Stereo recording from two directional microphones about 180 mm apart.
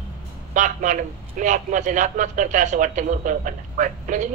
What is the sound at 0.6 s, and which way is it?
A man's voice, 45° right (ahead or behind).